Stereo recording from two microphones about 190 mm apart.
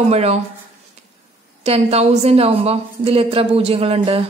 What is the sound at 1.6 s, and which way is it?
A woman's voice, 30° right (ahead or behind).